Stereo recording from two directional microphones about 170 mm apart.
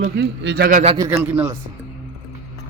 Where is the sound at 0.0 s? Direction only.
65° right (ahead or behind).